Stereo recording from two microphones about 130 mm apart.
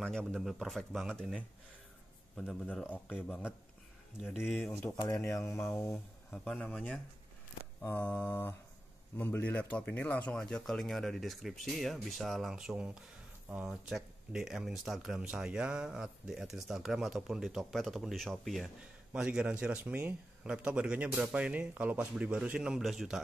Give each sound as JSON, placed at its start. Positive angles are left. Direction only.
{"t": 0.0, "sound": "speech", "side_deg": 5}
{"t": 2.7, "sound": "speech", "side_deg": 10}
{"t": 3.1, "sound": "speech", "side_deg": -5}
{"t": 4.6, "sound": "speech", "side_deg": 15}
{"t": 6.3, "sound": "speech", "side_deg": 5}